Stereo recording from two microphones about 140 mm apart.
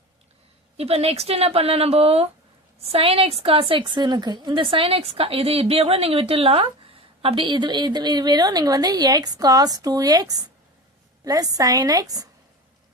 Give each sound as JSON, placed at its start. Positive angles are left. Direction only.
{"t": 0.8, "sound": "a woman's voice", "side_deg": -45}